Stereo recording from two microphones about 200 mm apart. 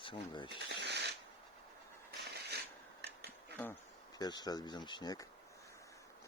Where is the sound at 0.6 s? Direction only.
60° right (ahead or behind).